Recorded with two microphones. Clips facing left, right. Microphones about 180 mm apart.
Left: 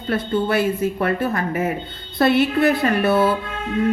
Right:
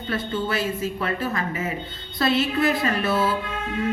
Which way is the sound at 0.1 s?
55° left (ahead or behind).